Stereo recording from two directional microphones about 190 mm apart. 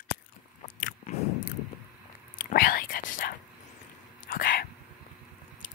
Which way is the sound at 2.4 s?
50° left (ahead or behind).